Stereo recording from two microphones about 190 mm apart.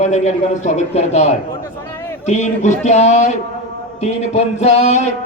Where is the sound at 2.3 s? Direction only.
35° left (ahead or behind).